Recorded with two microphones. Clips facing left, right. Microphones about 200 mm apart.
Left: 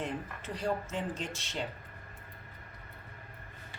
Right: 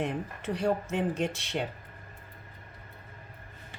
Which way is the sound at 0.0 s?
65° right (ahead or behind).